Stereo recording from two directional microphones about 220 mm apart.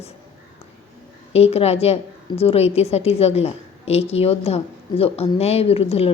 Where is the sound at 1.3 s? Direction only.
25° left (ahead or behind).